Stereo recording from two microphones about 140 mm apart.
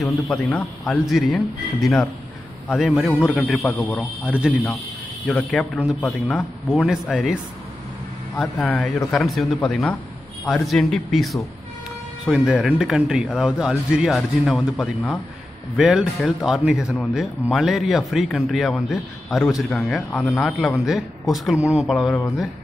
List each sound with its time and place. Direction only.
0.0 s speech: centre (ahead or behind)
8.6 s speech: 10° left (ahead or behind)
9.1 s speech: centre (ahead or behind)